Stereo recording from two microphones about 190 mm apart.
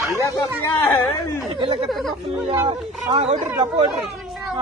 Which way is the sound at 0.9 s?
10° left (ahead or behind).